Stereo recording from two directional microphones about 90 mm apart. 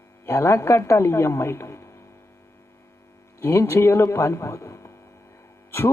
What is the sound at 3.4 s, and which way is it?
A woman's voice, 30° left (ahead or behind).